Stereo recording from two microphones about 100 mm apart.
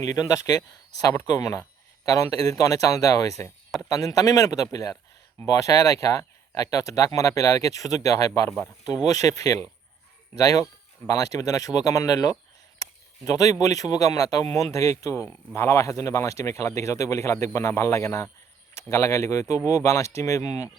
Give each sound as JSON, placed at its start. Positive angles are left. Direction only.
{"t": 0.0, "sound": "speech", "side_deg": 35}